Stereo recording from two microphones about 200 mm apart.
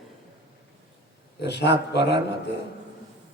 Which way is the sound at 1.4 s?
55° left (ahead or behind).